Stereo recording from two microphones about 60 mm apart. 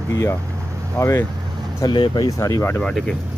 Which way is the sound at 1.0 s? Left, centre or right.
Left.